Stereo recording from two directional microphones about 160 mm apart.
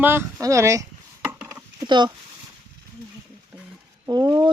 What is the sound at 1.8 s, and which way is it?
Speech, 30° right (ahead or behind).